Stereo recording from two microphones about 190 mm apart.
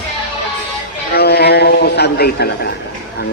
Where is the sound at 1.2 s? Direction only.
60° left (ahead or behind).